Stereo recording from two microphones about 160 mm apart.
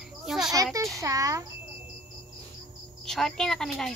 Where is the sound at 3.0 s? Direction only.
Centre (ahead or behind).